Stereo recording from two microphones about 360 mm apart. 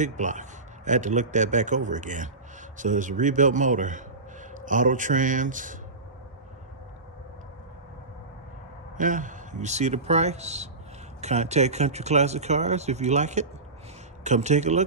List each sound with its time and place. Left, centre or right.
0.0 s a man's voice: centre
8.9 s a man's voice: right